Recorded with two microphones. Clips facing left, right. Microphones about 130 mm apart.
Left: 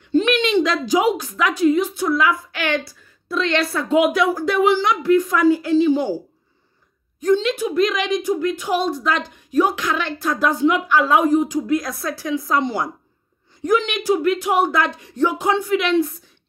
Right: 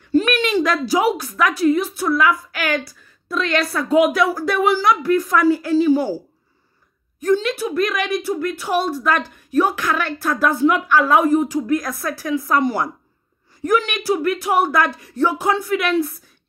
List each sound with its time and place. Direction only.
0.2 s a sound: 20° left (ahead or behind)
1.0 s a woman's voice: 20° left (ahead or behind)
7.3 s a woman's voice: 20° left (ahead or behind)